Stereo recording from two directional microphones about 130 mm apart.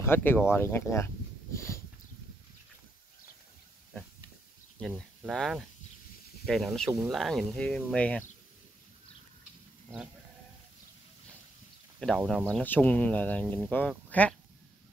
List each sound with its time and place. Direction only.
0.0 s speech: 15° left (ahead or behind)
4.7 s speech: 5° left (ahead or behind)
12.0 s speech: 10° left (ahead or behind)